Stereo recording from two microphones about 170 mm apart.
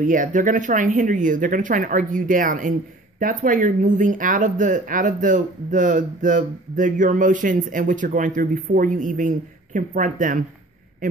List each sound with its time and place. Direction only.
0.0 s speech: 50° right (ahead or behind)